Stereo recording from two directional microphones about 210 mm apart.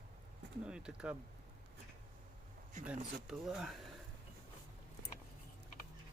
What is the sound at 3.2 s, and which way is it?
Speech, centre (ahead or behind).